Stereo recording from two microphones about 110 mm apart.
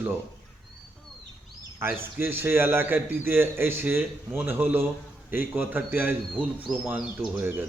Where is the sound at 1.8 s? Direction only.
20° right (ahead or behind).